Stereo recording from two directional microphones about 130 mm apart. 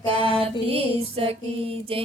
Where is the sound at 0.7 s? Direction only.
45° right (ahead or behind).